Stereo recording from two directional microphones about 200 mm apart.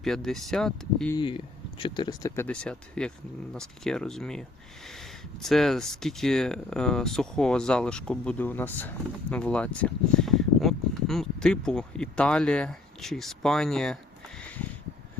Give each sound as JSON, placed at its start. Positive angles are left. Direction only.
{"t": 0.0, "sound": "speech", "side_deg": 0}
{"t": 1.1, "sound": "speech", "side_deg": 25}